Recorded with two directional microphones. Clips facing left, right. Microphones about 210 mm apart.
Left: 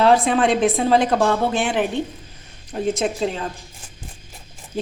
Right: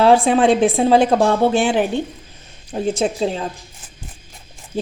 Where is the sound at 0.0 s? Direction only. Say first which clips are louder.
Right 3 dB; 30° right (ahead or behind).